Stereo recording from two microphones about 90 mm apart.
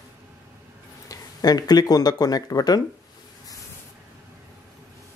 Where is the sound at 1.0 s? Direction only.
45° left (ahead or behind).